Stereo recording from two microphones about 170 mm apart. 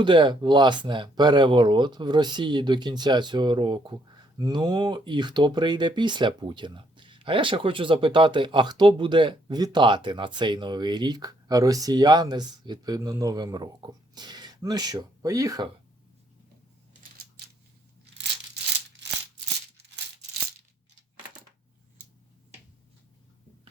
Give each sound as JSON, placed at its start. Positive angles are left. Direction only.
{"t": 0.0, "sound": "speech", "side_deg": -30}